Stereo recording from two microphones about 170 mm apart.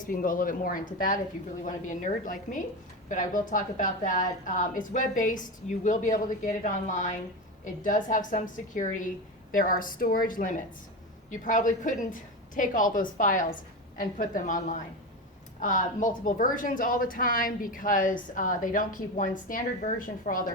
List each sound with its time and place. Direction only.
0.1 s a woman's voice: 55° left (ahead or behind)